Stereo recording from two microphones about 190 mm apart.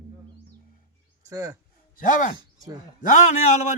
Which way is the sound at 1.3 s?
15° right (ahead or behind).